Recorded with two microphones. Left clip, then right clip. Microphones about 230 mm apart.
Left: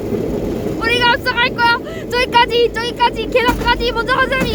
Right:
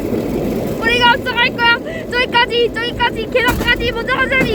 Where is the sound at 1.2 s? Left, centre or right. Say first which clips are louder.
Even; centre.